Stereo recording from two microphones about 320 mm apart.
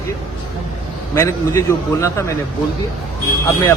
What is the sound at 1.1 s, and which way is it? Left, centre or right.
A man's voice, centre.